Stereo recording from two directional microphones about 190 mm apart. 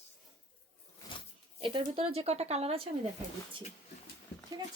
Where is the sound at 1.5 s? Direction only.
25° right (ahead or behind).